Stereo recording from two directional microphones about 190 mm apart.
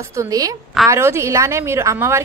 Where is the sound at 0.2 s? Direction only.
20° right (ahead or behind).